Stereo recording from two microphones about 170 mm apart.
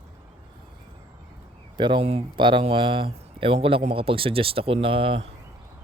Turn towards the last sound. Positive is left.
turn(degrees=-30)  # may be behind; listen again after turning